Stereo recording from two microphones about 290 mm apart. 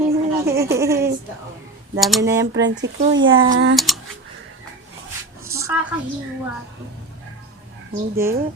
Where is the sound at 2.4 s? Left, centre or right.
Right.